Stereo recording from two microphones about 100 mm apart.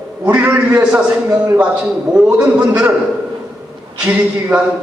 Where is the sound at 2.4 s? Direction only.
15° right (ahead or behind).